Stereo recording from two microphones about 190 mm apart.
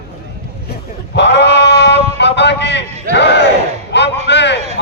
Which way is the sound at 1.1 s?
65° left (ahead or behind).